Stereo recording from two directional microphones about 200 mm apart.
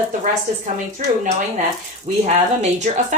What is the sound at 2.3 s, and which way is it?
Speech, 35° right (ahead or behind).